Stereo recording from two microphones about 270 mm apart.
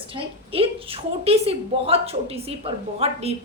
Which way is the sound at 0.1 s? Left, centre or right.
Right.